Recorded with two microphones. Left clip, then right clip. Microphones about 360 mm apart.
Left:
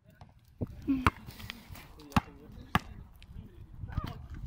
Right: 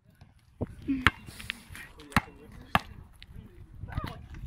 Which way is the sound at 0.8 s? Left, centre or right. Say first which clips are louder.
Right 3 dB; centre.